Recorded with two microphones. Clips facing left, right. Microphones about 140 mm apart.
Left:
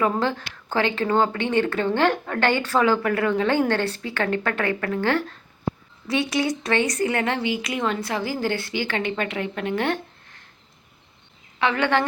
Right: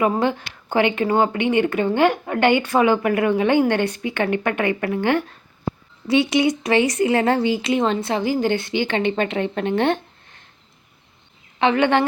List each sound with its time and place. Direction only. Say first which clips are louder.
0.0 s a woman's voice: right 3 dB; 15° right (ahead or behind)
7.3 s speech: right 6 dB; 40° right (ahead or behind)
7.6 s a woman's voice: right 6 dB; 25° right (ahead or behind)
11.6 s a woman's voice: right 4 dB; 20° right (ahead or behind)